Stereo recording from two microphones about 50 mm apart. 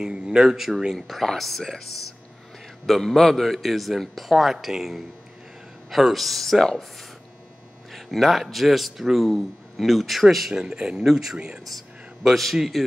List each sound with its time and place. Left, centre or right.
0.0 s speech: centre
0.9 s a man's voice: centre
2.9 s a man's voice: centre
10.5 s speech: centre
11.1 s speech: centre
11.3 s speech: centre
12.3 s a man's voice: centre